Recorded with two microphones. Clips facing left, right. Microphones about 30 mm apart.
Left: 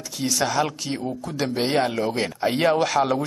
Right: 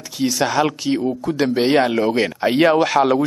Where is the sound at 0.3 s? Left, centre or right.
Centre.